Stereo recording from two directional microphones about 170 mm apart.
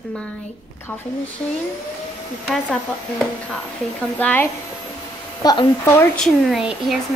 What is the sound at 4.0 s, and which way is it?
Speech, 10° left (ahead or behind).